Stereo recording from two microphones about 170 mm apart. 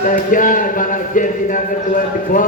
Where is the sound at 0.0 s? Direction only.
50° left (ahead or behind).